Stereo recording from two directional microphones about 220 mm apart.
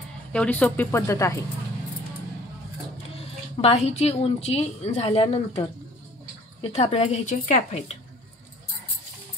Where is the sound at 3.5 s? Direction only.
30° left (ahead or behind).